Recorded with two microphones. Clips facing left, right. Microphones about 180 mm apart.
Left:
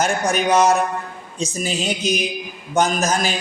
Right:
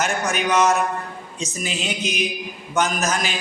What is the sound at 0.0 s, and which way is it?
A man's voice, 35° left (ahead or behind).